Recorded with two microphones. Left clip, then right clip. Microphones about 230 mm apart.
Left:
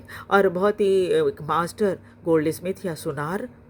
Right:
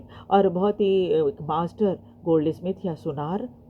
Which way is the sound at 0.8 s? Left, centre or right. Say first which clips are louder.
Left 1 dB; left.